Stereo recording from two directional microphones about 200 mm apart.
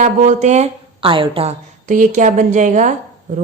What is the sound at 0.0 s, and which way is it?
A woman's voice, 35° right (ahead or behind).